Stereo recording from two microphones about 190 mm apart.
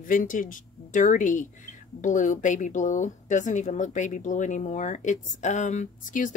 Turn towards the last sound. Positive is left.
turn(degrees=40)  # may be behind; listen again after turning